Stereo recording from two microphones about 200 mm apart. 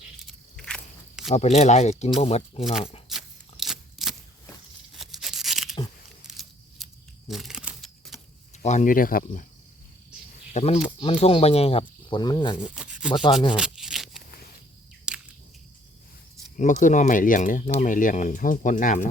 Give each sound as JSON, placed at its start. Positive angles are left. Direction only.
{"t": 0.3, "sound": "a sound", "side_deg": 5}
{"t": 1.3, "sound": "speech", "side_deg": 30}
{"t": 3.1, "sound": "crunch", "side_deg": 0}
{"t": 4.9, "sound": "tearing", "side_deg": 0}
{"t": 6.2, "sound": "a sound", "side_deg": 0}
{"t": 8.6, "sound": "speech", "side_deg": 40}
{"t": 10.5, "sound": "speech", "side_deg": 30}
{"t": 12.7, "sound": "rub", "side_deg": -5}
{"t": 13.1, "sound": "speech", "side_deg": 25}
{"t": 13.6, "sound": "a sound", "side_deg": 0}
{"t": 15.1, "sound": "cricket", "side_deg": -5}
{"t": 16.6, "sound": "speech", "side_deg": 40}